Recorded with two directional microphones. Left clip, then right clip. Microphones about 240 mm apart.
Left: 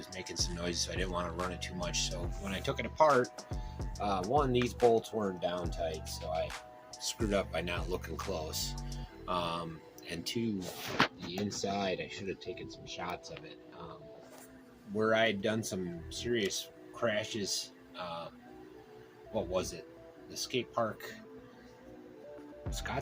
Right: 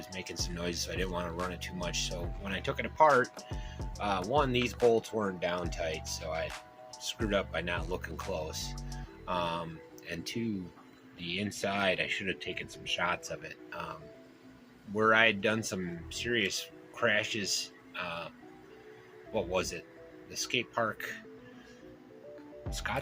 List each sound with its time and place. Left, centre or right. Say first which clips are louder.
0.0 s speech: left 1 dB; centre
14.9 s speech: right 4 dB; centre
19.3 s speech: right 2 dB; centre
22.8 s speech: right 4 dB; centre